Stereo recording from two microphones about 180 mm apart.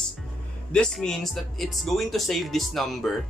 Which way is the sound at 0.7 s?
5° left (ahead or behind).